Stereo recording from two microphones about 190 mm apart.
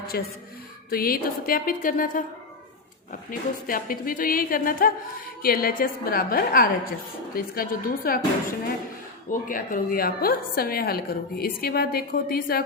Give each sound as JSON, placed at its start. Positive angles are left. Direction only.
{"t": 0.1, "sound": "a woman's voice", "side_deg": 55}
{"t": 3.2, "sound": "a woman's voice", "side_deg": 45}
{"t": 9.3, "sound": "a woman's voice", "side_deg": 45}